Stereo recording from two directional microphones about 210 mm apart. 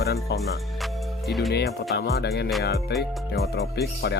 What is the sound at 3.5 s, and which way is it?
Speech, 50° left (ahead or behind).